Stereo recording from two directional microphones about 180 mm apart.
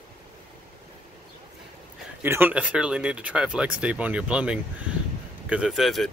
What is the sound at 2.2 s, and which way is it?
Speech, 10° right (ahead or behind).